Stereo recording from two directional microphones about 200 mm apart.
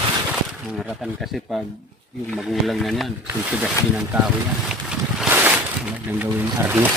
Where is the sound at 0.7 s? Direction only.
5° right (ahead or behind).